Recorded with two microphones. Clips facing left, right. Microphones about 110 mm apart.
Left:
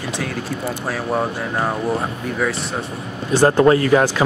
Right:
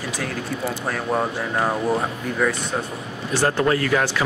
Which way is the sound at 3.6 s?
30° left (ahead or behind).